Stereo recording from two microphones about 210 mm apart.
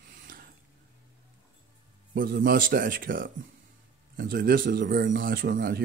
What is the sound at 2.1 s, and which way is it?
A man's voice, 45° right (ahead or behind).